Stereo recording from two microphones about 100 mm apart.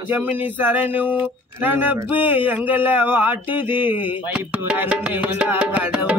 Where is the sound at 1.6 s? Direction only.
20° right (ahead or behind).